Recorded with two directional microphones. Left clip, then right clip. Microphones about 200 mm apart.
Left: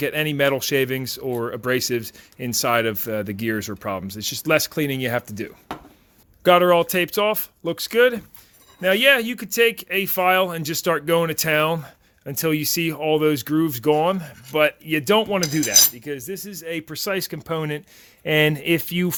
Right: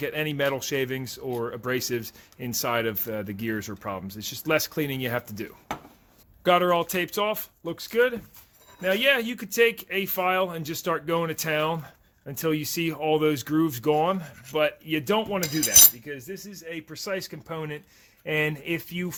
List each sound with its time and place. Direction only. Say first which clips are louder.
0.0 s speech: left 6 dB; 30° left (ahead or behind); by 19.1 s 50° left (ahead or behind)